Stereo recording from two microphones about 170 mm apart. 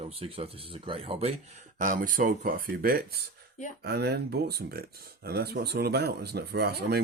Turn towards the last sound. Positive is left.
turn(degrees=-70)  # may be behind; listen again after turning